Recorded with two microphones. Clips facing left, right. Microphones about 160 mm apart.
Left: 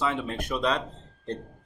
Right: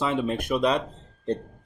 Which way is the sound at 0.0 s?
15° right (ahead or behind).